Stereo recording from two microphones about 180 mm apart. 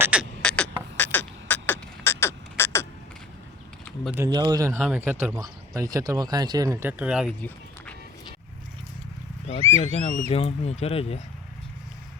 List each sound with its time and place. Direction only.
0.0 s beatboxing: 5° right (ahead or behind)
0.4 s beatboxing: 5° left (ahead or behind)
0.9 s a sound: 10° left (ahead or behind)
4.3 s speech: 25° right (ahead or behind)
4.8 s speech: 5° right (ahead or behind)
6.7 s speech: 10° right (ahead or behind)
9.8 s speech: 35° left (ahead or behind)